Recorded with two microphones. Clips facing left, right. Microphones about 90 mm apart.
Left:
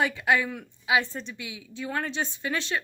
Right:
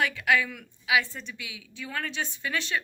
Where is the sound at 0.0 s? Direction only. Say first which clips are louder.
Left 1 dB; 30° left (ahead or behind).